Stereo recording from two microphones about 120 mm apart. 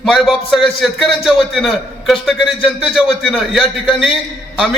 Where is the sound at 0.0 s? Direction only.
Centre (ahead or behind).